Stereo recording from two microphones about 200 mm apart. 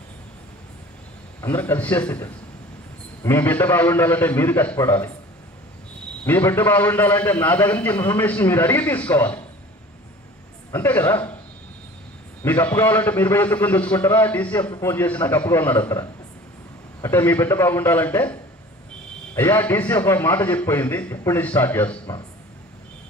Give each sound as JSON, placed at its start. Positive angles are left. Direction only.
{"t": 1.4, "sound": "a man's voice", "side_deg": 10}
{"t": 6.2, "sound": "a man's voice", "side_deg": 10}
{"t": 10.7, "sound": "a man's voice", "side_deg": 10}
{"t": 12.4, "sound": "a man's voice", "side_deg": 10}
{"t": 14.6, "sound": "a man's voice", "side_deg": 25}
{"t": 14.9, "sound": "a man's voice", "side_deg": 10}